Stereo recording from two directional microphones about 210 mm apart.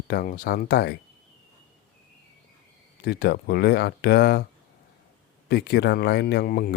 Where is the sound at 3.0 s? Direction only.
50° left (ahead or behind).